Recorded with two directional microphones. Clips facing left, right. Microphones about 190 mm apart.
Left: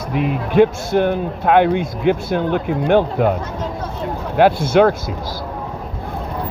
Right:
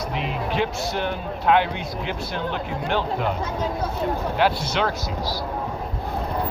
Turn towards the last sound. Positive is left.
turn(degrees=50)  # may be behind; listen again after turning